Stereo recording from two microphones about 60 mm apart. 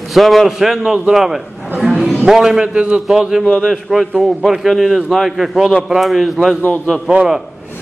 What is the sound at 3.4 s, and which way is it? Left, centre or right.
Speech, centre.